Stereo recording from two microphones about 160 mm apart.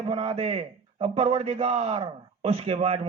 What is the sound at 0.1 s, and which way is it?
A man's voice, 35° right (ahead or behind).